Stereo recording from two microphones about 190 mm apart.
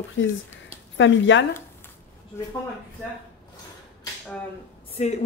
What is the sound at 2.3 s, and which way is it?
Speech, 15° left (ahead or behind).